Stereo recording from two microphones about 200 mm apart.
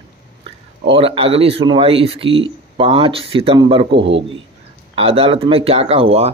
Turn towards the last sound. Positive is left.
turn(degrees=-30)  # may be behind; listen again after turning